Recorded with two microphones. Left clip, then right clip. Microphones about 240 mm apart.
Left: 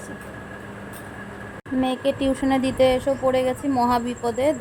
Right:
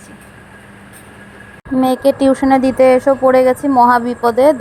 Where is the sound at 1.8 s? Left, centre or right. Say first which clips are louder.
Right 11 dB; right.